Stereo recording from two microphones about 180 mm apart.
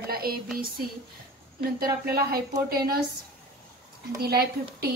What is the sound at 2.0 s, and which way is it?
Speech, 55° right (ahead or behind).